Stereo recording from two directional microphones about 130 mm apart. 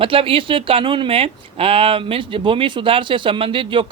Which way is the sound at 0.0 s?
45° right (ahead or behind).